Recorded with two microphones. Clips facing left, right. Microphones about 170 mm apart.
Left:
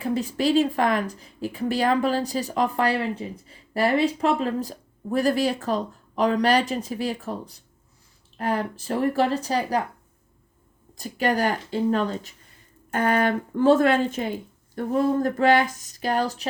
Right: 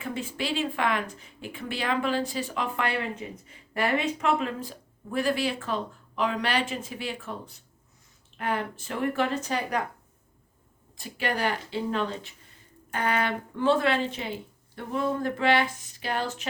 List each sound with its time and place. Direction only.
0.0 s a woman's voice: 40° left (ahead or behind)
10.9 s a woman's voice: 40° left (ahead or behind)